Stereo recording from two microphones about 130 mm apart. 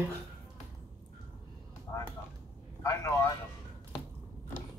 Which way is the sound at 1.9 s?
25° left (ahead or behind).